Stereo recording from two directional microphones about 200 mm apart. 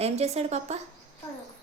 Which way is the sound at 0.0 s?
30° right (ahead or behind).